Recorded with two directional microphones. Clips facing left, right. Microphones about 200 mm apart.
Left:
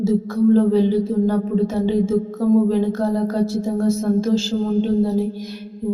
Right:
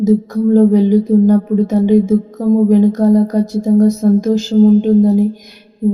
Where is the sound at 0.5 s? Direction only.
15° right (ahead or behind).